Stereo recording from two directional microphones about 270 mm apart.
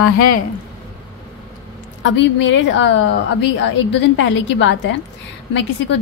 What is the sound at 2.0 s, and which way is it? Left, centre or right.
A woman's voice, left.